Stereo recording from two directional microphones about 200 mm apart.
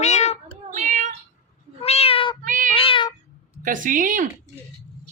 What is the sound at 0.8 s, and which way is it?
Meow, 40° right (ahead or behind).